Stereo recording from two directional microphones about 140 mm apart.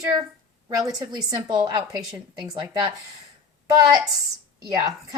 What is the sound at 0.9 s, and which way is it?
Speech, 30° right (ahead or behind).